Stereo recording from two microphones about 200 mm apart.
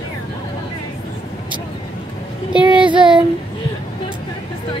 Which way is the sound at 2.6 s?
25° right (ahead or behind).